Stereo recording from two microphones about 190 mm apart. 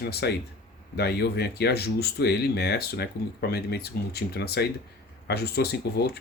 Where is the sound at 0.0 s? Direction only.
60° left (ahead or behind).